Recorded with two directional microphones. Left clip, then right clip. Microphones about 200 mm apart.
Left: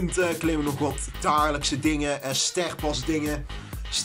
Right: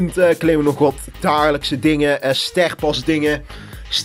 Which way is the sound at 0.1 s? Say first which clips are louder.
Right 12 dB; 25° right (ahead or behind).